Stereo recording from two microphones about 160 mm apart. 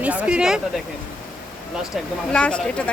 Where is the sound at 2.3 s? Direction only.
5° left (ahead or behind).